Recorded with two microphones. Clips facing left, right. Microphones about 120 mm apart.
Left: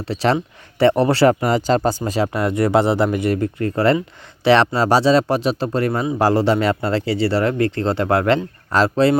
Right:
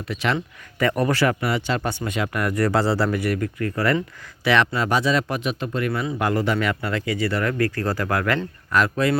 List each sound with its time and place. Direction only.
0.0 s speech: 35° left (ahead or behind)